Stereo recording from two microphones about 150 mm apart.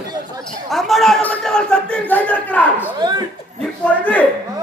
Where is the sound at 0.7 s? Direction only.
Centre (ahead or behind).